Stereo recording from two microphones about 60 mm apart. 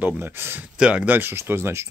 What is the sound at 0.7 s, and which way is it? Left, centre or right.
Speech, centre.